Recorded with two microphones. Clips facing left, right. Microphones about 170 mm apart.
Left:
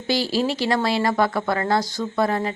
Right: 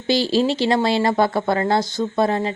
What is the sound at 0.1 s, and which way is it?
Speech, 25° right (ahead or behind).